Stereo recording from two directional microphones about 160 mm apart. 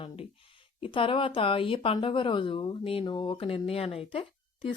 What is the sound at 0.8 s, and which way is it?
Speech, 35° left (ahead or behind).